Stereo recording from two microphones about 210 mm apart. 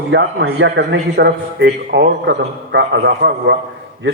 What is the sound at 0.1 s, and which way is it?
A man's voice, 55° right (ahead or behind).